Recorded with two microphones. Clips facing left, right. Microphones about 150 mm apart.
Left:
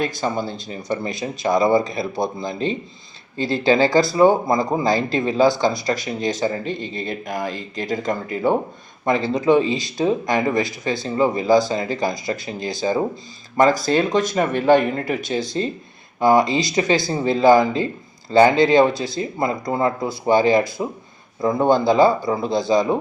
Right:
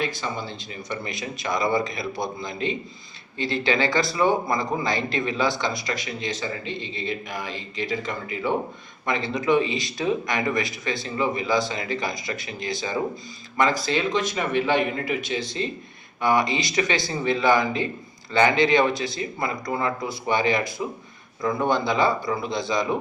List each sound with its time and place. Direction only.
0.0 s speech: 40° left (ahead or behind)